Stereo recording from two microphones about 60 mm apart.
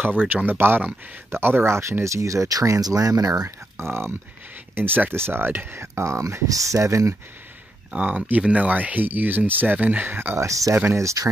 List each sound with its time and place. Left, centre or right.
0.5 s speech: right
3.4 s speech: right
4.7 s speech: right
7.9 s speech: right
10.4 s speech: right